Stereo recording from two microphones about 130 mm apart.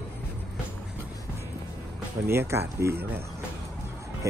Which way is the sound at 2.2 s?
20° right (ahead or behind).